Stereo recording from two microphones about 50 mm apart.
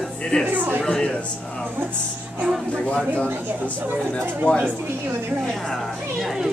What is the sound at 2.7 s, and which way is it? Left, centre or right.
Speech, left.